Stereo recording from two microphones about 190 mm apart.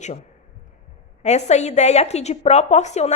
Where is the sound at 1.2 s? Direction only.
35° left (ahead or behind).